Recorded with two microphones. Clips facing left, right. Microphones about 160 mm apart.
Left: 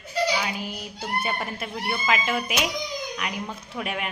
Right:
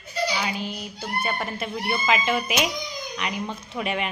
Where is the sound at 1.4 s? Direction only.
5° left (ahead or behind).